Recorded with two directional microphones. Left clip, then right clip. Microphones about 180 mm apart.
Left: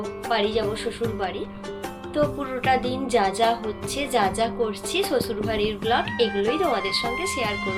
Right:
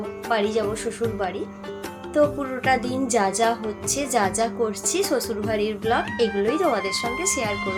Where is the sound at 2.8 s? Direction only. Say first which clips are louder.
Even; 20° right (ahead or behind).